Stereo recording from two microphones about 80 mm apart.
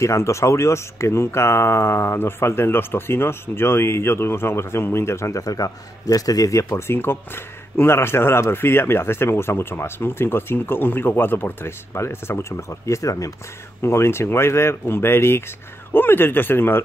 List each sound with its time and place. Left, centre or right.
0.0 s speech: left
7.0 s speech: left
13.8 s speech: left